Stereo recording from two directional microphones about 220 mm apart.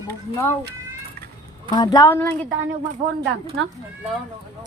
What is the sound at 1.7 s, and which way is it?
Speech, 15° left (ahead or behind).